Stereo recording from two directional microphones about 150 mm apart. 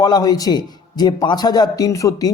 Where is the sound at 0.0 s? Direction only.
25° left (ahead or behind).